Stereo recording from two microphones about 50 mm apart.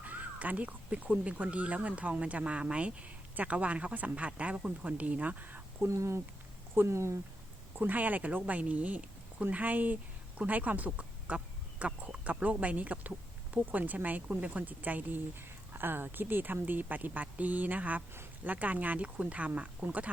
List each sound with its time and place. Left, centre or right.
0.0 s speech: right
5.9 s speech: right
7.8 s speech: right
15.4 s speech: right